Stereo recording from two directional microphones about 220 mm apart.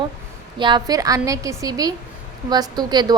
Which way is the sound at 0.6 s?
20° right (ahead or behind).